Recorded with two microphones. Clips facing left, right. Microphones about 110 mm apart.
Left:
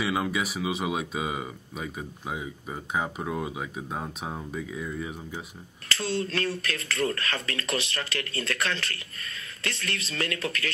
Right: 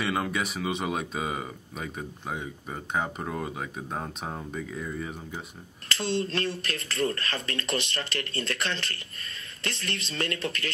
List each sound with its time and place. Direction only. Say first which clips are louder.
0.0 s speech: left 1 dB; 5° left (ahead or behind)
5.9 s speech: right 1 dB; 30° right (ahead or behind)